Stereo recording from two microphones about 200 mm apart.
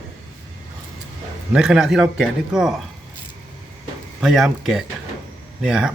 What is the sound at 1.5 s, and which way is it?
Speech, 5° right (ahead or behind).